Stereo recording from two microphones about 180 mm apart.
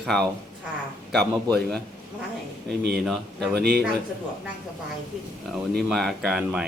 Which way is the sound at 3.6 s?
65° right (ahead or behind).